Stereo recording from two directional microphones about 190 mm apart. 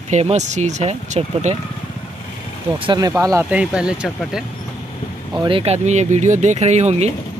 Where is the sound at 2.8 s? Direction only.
20° right (ahead or behind); by 4.5 s 5° right (ahead or behind).